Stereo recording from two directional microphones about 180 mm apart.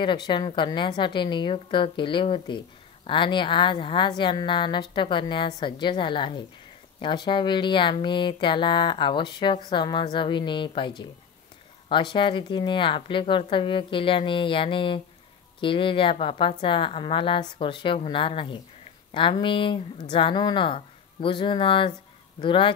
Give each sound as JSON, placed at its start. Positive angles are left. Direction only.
{"t": 0.0, "sound": "a woman's voice", "side_deg": 25}